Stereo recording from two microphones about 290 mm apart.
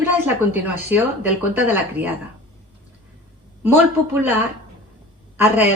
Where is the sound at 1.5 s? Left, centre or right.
Centre.